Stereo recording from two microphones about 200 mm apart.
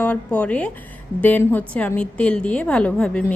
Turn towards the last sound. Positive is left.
turn(degrees=5)  # may be behind; listen again after turning